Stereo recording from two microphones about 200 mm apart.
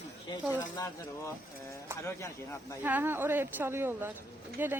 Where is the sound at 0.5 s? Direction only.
15° left (ahead or behind).